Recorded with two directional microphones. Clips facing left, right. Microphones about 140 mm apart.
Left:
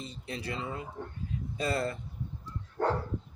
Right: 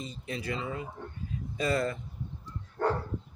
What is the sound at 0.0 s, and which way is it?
Speech, 35° left (ahead or behind).